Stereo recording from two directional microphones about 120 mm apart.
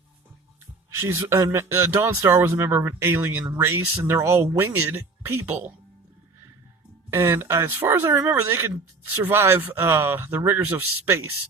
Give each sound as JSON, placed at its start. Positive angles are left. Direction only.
{"t": 0.9, "sound": "speech", "side_deg": -20}
{"t": 7.1, "sound": "speech", "side_deg": -20}